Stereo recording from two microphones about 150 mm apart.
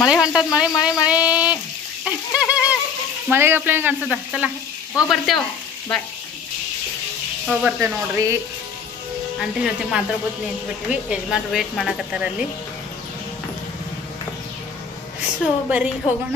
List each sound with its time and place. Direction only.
0.0 s speech: 5° right (ahead or behind)
1.0 s a sound: 10° right (ahead or behind)
3.3 s speech: 15° right (ahead or behind)
7.8 s speech: 15° right (ahead or behind)
9.4 s speech: 5° right (ahead or behind)
15.4 s speech: 10° right (ahead or behind)